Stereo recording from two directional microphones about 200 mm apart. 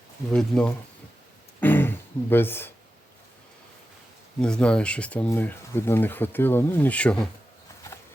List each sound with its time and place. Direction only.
0.3 s speech: 5° left (ahead or behind)
1.6 s a sound: 10° left (ahead or behind)
4.4 s speech: 5° left (ahead or behind)